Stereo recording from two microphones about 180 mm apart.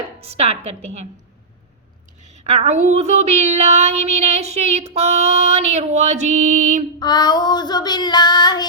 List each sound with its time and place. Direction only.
0.2 s child singing: 35° right (ahead or behind)
2.3 s child singing: 40° right (ahead or behind)
7.0 s child singing: 25° left (ahead or behind)